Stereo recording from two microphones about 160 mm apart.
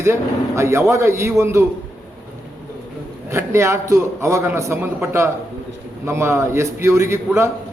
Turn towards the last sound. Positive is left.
turn(degrees=-15)  # may be behind; listen again after turning